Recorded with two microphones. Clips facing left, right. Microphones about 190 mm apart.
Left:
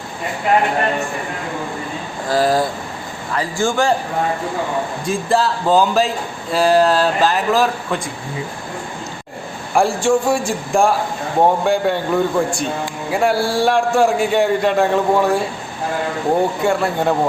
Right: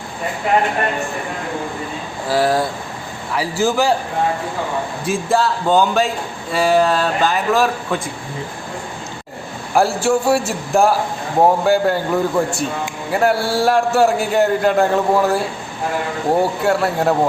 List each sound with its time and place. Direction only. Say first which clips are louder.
2.2 s a man's voice: left 1 dB; 5° right (ahead or behind)
5.0 s a man's voice: even; centre (ahead or behind)
9.7 s a man's voice: even; 5° right (ahead or behind)